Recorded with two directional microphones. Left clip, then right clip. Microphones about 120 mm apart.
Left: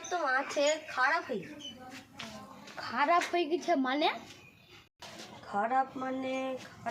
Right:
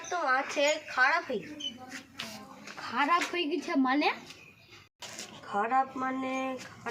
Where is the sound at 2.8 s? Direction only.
30° left (ahead or behind).